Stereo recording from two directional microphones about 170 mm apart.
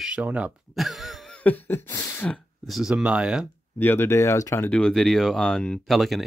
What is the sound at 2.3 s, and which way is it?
Speech, centre (ahead or behind).